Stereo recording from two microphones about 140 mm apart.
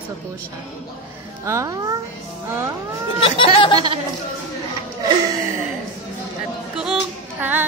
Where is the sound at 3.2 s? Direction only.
40° left (ahead or behind).